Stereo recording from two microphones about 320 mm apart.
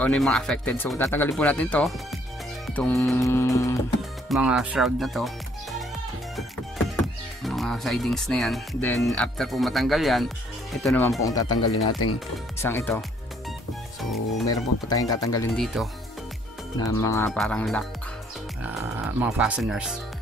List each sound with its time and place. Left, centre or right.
0.0 s speech: centre
2.6 s music: centre
4.3 s speech: centre
7.4 s speech: centre
10.8 s music: centre
11.5 s speech: left
12.5 s music: centre
14.5 s music: centre
15.6 s speech: centre